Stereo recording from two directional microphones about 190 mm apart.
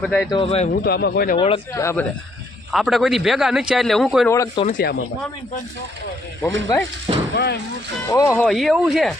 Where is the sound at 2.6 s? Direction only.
Centre (ahead or behind).